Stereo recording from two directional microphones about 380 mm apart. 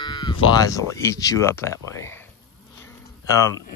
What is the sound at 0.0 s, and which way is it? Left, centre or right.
Sheep, centre.